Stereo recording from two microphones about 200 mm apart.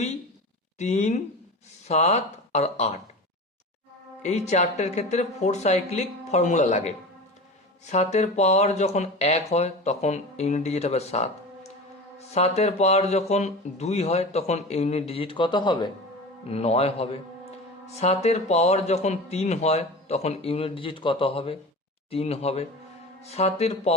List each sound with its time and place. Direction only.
0.8 s speech: 35° left (ahead or behind)
4.2 s speech: 35° left (ahead or behind)